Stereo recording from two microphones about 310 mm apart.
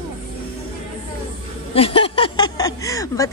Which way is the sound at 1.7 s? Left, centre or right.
Centre.